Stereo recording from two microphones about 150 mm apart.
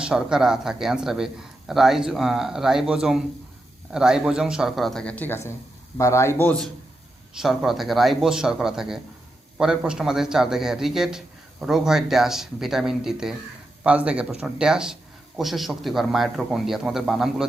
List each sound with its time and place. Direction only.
0.0 s a man's voice: 5° right (ahead or behind)
7.3 s a man's voice: centre (ahead or behind)